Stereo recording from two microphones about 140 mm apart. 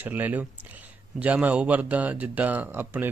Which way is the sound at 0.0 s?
10° right (ahead or behind).